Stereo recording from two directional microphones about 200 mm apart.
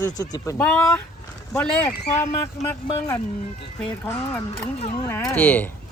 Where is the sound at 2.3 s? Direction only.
15° left (ahead or behind).